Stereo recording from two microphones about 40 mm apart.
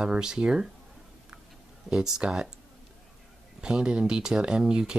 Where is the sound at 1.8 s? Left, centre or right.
Centre.